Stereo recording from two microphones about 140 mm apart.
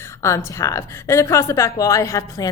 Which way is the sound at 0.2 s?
20° left (ahead or behind).